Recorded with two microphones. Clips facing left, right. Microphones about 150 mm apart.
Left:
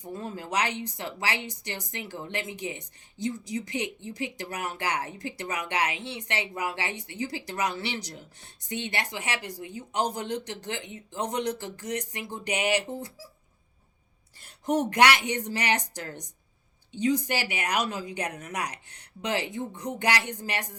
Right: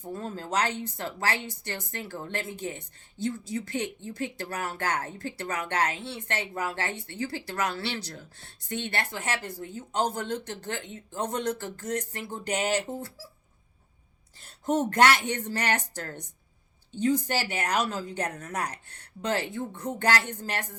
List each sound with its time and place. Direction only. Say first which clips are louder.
0.0 s a woman's voice: right 1 dB; 15° left (ahead or behind)
14.4 s a woman's voice: even; 15° left (ahead or behind)